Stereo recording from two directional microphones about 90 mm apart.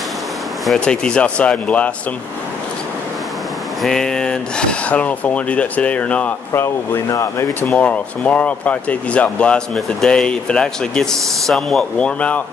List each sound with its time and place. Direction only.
0.7 s speech: 10° left (ahead or behind)
3.8 s speech: 5° left (ahead or behind)
6.5 s speech: 30° left (ahead or behind)
7.6 s speech: 15° left (ahead or behind)
12.2 s speech: 15° left (ahead or behind)